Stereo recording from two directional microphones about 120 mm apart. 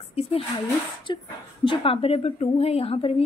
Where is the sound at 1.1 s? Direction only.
40° left (ahead or behind).